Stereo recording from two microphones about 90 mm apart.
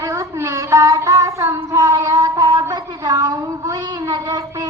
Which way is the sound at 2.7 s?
50° right (ahead or behind).